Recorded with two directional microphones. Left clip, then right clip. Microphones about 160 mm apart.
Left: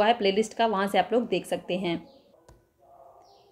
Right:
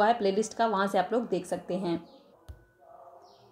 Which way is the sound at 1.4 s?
40° left (ahead or behind).